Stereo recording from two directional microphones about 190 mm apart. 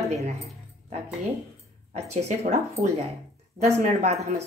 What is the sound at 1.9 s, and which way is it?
Speech, 35° right (ahead or behind).